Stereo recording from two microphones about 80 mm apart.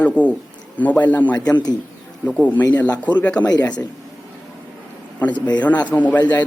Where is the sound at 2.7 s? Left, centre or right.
Centre.